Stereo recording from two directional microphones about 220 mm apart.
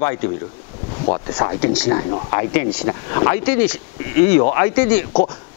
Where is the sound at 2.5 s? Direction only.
10° left (ahead or behind).